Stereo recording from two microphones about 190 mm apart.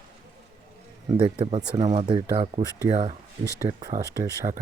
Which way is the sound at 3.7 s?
20° right (ahead or behind).